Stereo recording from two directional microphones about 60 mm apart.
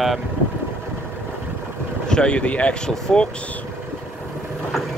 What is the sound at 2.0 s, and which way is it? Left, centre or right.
Speech, centre.